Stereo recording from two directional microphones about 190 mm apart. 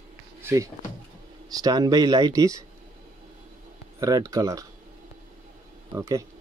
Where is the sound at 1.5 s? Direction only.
20° right (ahead or behind).